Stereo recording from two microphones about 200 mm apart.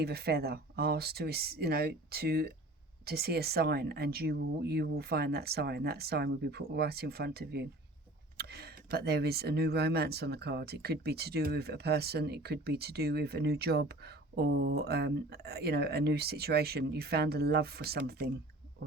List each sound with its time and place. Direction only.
0.0 s speech: 50° right (ahead or behind)